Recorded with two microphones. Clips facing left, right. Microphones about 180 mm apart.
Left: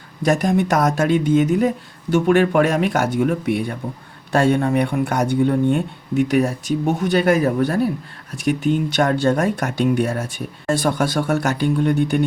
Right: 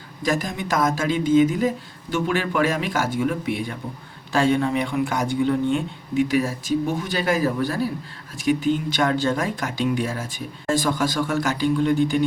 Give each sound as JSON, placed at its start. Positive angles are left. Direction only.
{"t": 0.4, "sound": "speech", "side_deg": 55}